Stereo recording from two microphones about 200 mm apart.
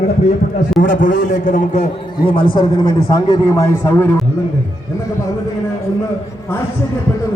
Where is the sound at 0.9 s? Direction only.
40° left (ahead or behind); by 4.2 s 10° left (ahead or behind).